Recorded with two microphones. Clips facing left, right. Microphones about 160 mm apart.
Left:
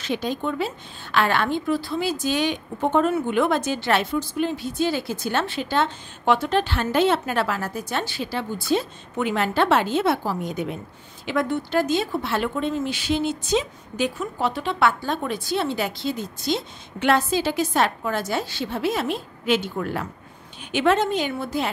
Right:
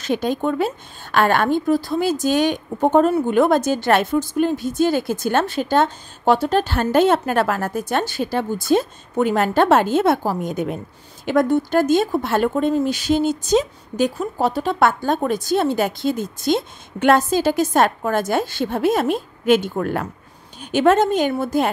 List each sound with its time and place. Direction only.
0.0 s a woman's voice: 45° right (ahead or behind)